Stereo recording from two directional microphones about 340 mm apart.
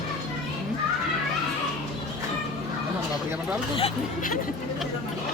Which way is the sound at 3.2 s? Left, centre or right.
Centre.